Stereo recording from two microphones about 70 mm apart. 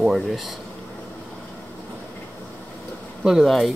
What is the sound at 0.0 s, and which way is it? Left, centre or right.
Speech, centre.